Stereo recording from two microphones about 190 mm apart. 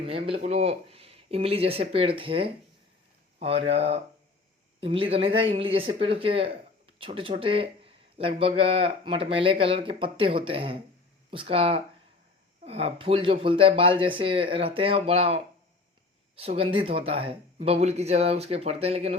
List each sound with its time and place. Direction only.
0.0 s speech: 30° right (ahead or behind)